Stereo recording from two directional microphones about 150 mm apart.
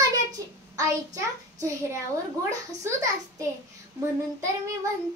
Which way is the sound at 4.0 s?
20° right (ahead or behind).